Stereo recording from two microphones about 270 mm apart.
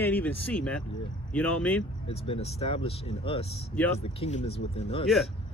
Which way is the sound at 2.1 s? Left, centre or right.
Left.